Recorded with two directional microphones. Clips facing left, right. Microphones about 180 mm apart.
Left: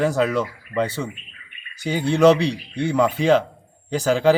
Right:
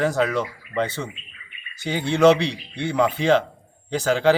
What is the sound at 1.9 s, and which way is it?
Speech, 35° left (ahead or behind).